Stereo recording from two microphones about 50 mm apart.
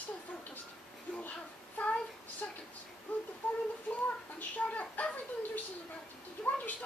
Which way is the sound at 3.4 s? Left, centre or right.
Left.